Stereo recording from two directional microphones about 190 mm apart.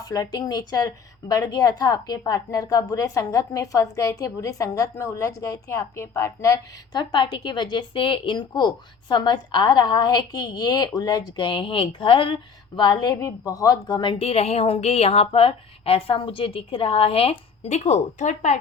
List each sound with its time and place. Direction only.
0.0 s a woman's voice: 20° left (ahead or behind); by 18.6 s 40° left (ahead or behind)